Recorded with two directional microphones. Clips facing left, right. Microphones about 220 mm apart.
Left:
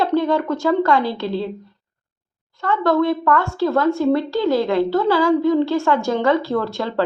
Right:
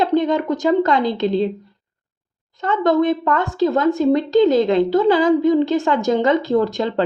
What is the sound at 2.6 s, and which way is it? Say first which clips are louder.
Speech: right 1 dB; 20° right (ahead or behind).